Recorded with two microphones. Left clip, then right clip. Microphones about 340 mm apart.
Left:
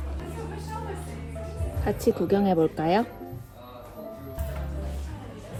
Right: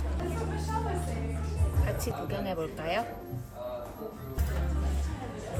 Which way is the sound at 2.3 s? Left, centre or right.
Left.